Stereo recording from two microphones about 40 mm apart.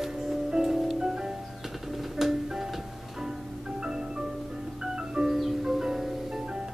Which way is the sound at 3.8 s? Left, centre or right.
Centre.